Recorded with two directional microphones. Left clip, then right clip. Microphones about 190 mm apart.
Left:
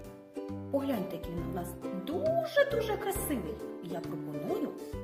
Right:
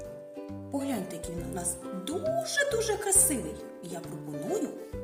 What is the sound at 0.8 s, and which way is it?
Speech, 15° left (ahead or behind).